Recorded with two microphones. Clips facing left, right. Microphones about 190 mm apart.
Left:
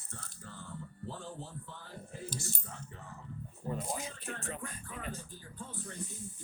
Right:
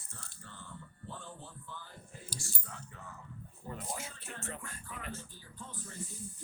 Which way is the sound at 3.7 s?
20° left (ahead or behind).